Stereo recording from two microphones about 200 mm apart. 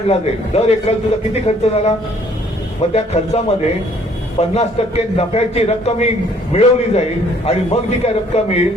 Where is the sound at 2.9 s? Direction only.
30° left (ahead or behind).